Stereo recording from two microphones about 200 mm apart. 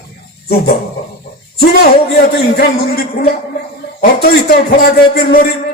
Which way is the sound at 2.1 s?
50° left (ahead or behind).